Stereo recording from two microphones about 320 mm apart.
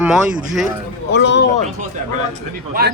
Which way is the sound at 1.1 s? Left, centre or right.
Left.